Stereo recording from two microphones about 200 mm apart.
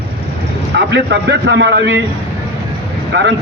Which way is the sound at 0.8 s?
60° right (ahead or behind).